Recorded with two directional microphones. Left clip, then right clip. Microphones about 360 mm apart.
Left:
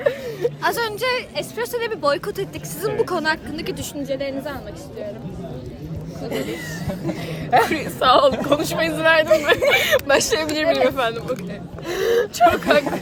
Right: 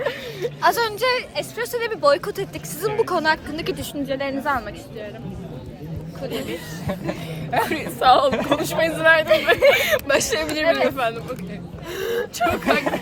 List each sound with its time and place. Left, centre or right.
0.0 s a woman's voice: centre
4.0 s a woman's voice: centre
7.7 s a woman's voice: centre
11.9 s speech: left
12.5 s a woman's voice: centre